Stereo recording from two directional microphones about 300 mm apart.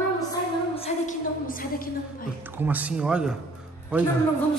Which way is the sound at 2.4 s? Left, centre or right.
Centre.